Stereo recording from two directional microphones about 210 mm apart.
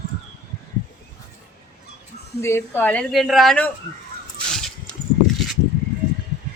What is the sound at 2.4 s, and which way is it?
A woman's voice, 10° left (ahead or behind).